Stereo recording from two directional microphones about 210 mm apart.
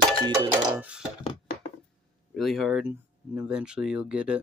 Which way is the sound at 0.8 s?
5° right (ahead or behind).